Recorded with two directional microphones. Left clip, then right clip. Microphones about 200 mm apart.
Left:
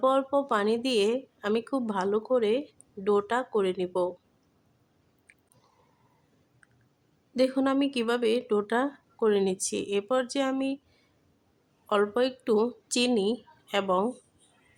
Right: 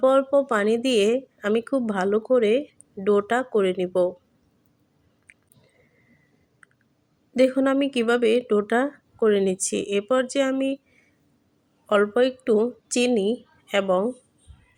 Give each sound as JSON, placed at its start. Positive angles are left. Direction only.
{"t": 0.0, "sound": "speech", "side_deg": -15}
{"t": 5.3, "sound": "a sound", "side_deg": -20}
{"t": 7.3, "sound": "speech", "side_deg": -15}
{"t": 11.9, "sound": "speech", "side_deg": -15}